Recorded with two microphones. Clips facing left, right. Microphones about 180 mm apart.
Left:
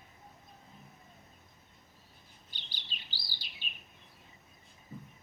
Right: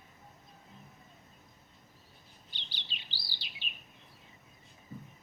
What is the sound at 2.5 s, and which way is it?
Chirp, 45° left (ahead or behind).